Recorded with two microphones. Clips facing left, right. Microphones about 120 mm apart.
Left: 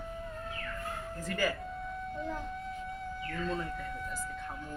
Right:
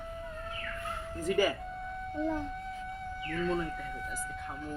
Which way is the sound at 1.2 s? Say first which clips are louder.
Right 5 dB; 20° right (ahead or behind).